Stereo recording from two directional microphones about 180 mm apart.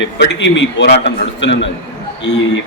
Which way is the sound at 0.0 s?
85° left.